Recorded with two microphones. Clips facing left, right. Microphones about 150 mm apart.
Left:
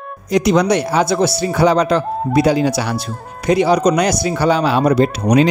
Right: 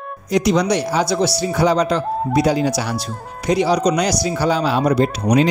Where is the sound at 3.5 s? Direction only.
55° left (ahead or behind).